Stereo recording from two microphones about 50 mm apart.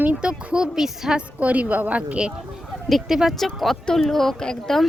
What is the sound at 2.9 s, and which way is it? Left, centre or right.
Speech, centre.